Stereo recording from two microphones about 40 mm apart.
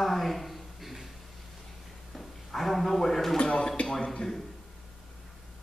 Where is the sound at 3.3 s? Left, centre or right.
Left.